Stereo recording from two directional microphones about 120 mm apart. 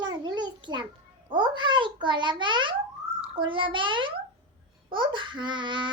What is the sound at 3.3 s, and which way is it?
A child's voice, 45° right (ahead or behind).